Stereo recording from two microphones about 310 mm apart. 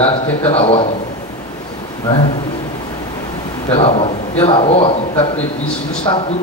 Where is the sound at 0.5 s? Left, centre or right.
Centre.